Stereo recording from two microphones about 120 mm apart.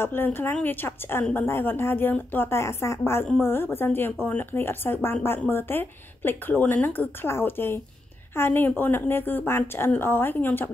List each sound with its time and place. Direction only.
0.0 s a woman's voice: 20° left (ahead or behind)